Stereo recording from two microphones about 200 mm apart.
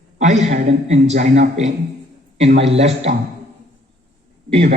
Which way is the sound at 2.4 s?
65° right (ahead or behind).